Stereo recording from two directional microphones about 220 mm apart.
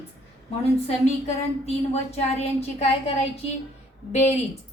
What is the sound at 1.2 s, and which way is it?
A woman's voice, 30° left (ahead or behind).